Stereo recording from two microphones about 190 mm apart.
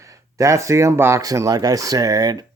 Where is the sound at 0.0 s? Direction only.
15° right (ahead or behind).